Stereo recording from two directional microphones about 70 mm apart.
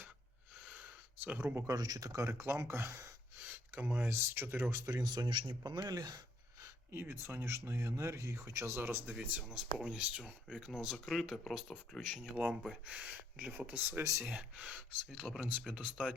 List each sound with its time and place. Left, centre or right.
0.7 s a sound: right
1.6 s speech: right
4.9 s speech: right
6.9 s speech: right
8.8 s speech: right
9.1 s speech: centre
10.7 s speech: centre
12.9 s speech: centre